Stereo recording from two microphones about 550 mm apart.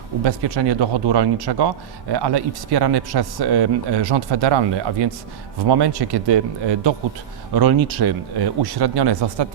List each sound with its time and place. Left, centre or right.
0.3 s speech: right